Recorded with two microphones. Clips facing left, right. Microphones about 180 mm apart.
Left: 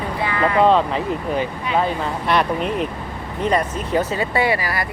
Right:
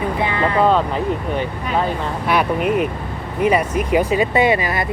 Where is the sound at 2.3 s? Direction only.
5° right (ahead or behind).